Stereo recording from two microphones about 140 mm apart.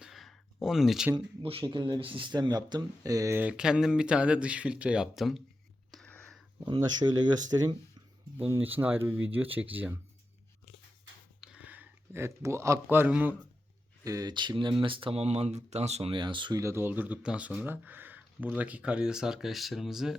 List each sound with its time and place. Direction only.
0.0 s a sound: centre (ahead or behind)
1.1 s speech: 40° right (ahead or behind); by 3.4 s 25° right (ahead or behind)
3.4 s speech: 5° right (ahead or behind)
5.9 s whispering: centre (ahead or behind)
6.7 s speech: 35° right (ahead or behind)
8.4 s speech: 15° right (ahead or behind)
11.3 s speech: 10° right (ahead or behind)
14.0 s speech: 25° right (ahead or behind); by 16.1 s 50° right (ahead or behind)
16.1 s speech: 35° right (ahead or behind)
16.6 s speech: 20° right (ahead or behind); by 20.1 s 5° right (ahead or behind)